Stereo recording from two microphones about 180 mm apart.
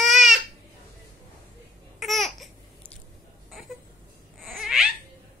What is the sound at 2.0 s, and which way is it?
Babbling, centre (ahead or behind).